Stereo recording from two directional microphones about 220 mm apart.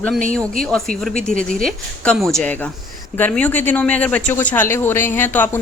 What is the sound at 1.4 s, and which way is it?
Speech, 35° right (ahead or behind).